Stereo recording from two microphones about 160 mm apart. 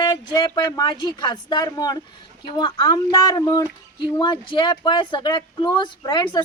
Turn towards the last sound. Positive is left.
turn(degrees=30)  # may be behind; listen again after turning